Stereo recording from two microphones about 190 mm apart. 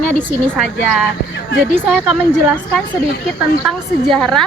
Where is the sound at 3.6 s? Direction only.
Centre (ahead or behind).